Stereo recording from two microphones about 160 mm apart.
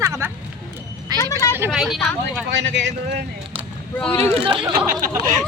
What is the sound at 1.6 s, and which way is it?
Speech, 10° right (ahead or behind).